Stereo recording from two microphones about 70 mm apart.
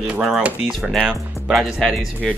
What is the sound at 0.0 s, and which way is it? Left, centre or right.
Speech, centre.